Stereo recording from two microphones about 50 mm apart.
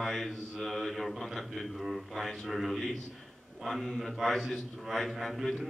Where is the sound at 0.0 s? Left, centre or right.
Centre.